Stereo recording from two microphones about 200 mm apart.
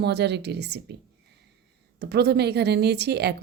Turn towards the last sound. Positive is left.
turn(degrees=-55)  # may be behind; listen again after turning